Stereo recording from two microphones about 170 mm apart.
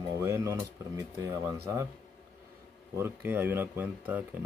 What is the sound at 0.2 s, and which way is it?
Speech, 15° right (ahead or behind).